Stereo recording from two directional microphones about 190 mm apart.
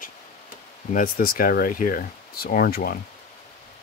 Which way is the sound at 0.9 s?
50° left (ahead or behind).